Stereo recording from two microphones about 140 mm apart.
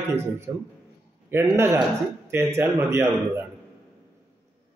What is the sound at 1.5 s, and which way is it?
A man's voice, 15° right (ahead or behind).